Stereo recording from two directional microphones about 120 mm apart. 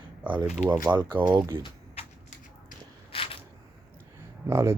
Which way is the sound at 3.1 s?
50° left (ahead or behind).